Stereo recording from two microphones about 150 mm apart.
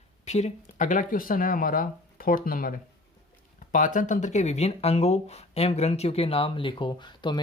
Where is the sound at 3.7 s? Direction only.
60° left (ahead or behind).